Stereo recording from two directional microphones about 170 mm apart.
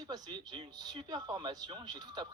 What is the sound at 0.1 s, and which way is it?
Speech, 25° right (ahead or behind).